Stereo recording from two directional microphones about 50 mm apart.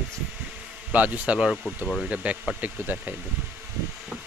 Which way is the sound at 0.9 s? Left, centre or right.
Right.